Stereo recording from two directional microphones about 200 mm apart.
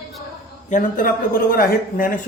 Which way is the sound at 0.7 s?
40° left (ahead or behind).